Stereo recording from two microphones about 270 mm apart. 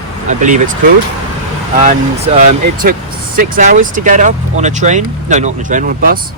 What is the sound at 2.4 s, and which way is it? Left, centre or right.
Speech, right.